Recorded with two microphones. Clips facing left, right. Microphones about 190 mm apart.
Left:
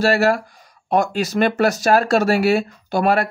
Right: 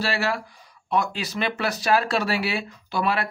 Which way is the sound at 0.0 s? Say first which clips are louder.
Left 9 dB; 45° left (ahead or behind).